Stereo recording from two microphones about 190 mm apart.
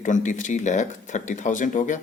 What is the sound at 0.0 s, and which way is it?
Speech, 40° left (ahead or behind).